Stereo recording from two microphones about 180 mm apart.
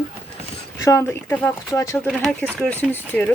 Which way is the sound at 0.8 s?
15° left (ahead or behind).